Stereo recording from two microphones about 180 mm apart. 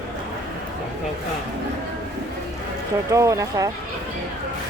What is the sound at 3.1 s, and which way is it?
Speech, 15° right (ahead or behind).